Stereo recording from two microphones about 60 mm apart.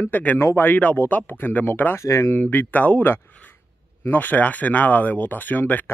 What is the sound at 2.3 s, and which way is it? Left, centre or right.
A man's voice, left.